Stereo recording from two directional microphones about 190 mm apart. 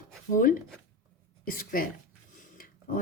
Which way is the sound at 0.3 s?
45° left (ahead or behind).